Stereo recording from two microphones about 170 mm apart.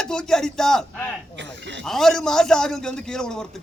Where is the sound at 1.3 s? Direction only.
90° right.